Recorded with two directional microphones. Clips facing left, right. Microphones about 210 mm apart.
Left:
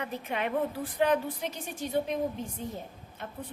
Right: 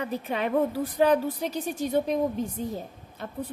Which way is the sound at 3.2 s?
35° right (ahead or behind).